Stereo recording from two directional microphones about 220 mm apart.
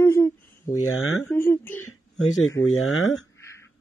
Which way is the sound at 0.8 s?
70° left (ahead or behind).